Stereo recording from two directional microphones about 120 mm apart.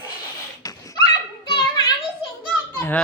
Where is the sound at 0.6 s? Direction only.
30° left (ahead or behind).